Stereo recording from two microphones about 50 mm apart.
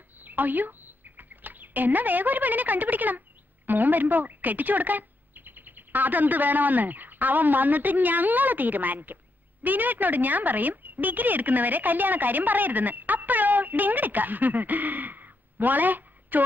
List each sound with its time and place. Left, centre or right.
0.2 s speech: right